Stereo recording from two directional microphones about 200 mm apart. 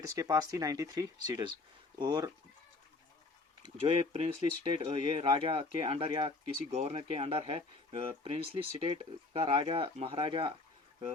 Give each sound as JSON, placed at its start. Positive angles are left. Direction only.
{"t": 0.0, "sound": "speech", "side_deg": -15}
{"t": 3.6, "sound": "speech", "side_deg": -25}